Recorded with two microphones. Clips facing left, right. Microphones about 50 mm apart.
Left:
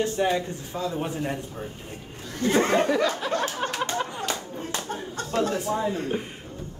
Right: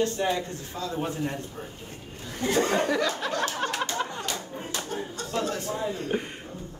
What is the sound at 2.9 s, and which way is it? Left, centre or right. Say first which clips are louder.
Speech: left 3 dB; centre.